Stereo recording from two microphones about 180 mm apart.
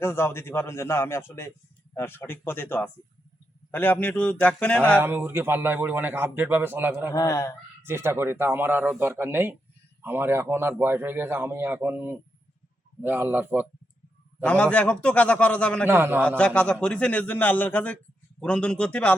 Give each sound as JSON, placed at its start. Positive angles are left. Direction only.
{"t": 0.0, "sound": "a man's voice", "side_deg": 15}
{"t": 4.9, "sound": "a man's voice", "side_deg": -10}
{"t": 7.1, "sound": "a man's voice", "side_deg": 20}
{"t": 7.8, "sound": "a man's voice", "side_deg": -15}
{"t": 14.4, "sound": "a man's voice", "side_deg": 5}
{"t": 15.9, "sound": "a man's voice", "side_deg": -10}
{"t": 16.4, "sound": "a man's voice", "side_deg": 5}